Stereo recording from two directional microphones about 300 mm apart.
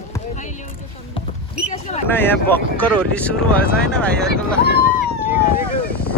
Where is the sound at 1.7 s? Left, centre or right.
Left.